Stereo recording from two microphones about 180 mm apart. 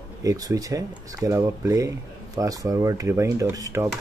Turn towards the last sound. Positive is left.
turn(degrees=-15)  # may be behind; listen again after turning